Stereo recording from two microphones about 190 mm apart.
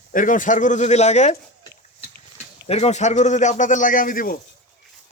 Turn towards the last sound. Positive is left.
turn(degrees=45)  # may be behind; listen again after turning